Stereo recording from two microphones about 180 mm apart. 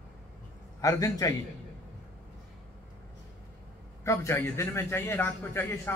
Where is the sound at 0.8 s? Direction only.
20° left (ahead or behind).